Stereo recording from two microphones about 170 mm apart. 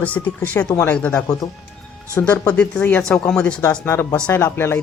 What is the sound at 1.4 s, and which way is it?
Speech, 20° left (ahead or behind).